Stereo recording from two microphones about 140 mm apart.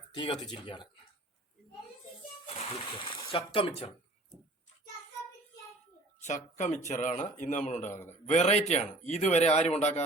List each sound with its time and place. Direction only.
0.1 s speech: 30° left (ahead or behind)
2.5 s speech: 40° left (ahead or behind)
6.1 s speech: 60° left (ahead or behind)